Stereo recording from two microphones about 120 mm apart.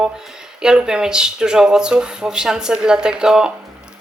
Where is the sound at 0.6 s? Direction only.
5° right (ahead or behind).